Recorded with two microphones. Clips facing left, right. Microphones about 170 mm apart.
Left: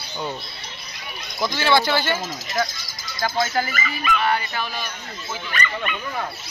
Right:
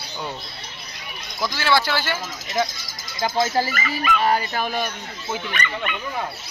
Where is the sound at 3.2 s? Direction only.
25° right (ahead or behind); by 4.9 s 50° right (ahead or behind).